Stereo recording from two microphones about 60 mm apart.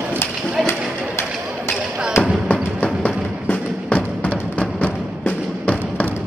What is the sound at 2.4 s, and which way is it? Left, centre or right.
Music, left.